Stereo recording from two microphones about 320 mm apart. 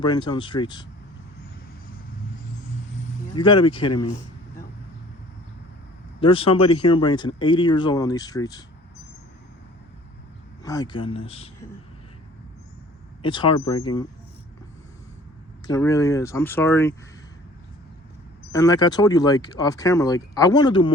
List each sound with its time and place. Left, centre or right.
0.0 s speech: centre
3.3 s speech: centre
6.1 s speech: centre
10.6 s speech: centre
13.2 s speech: centre
15.6 s speech: centre
18.5 s speech: centre